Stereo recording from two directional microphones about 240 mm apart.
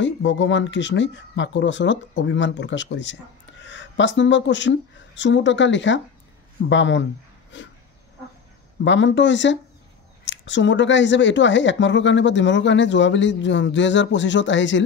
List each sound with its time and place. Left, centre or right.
0.0 s speech: left
8.8 s speech: left